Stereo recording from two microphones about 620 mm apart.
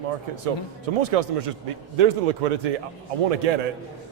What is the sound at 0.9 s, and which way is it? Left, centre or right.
A man's voice, right.